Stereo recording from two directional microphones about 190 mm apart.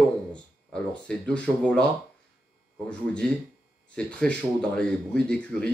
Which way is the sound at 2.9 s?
5° left (ahead or behind).